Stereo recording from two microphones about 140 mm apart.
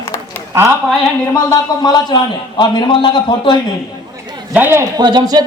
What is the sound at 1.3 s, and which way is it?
A man's voice, 25° left (ahead or behind).